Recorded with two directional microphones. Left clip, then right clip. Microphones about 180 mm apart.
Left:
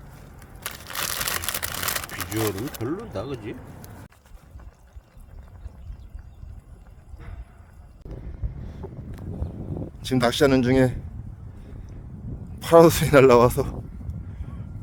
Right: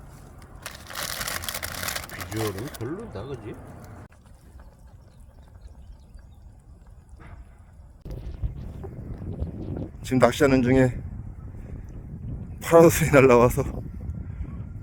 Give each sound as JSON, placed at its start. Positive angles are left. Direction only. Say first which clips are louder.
{"t": 0.6, "sound": "crumpling", "louder": "left 3 dB", "side_deg": 40}
{"t": 2.8, "sound": "speech", "louder": "left 6 dB", "side_deg": 50}
{"t": 8.1, "sound": "a sound", "louder": "left 1 dB", "side_deg": 0}
{"t": 12.5, "sound": "speech", "louder": "left 1 dB", "side_deg": 0}